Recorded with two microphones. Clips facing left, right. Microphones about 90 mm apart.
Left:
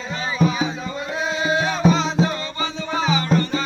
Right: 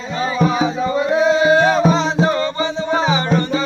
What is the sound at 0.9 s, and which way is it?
Music, 85° right.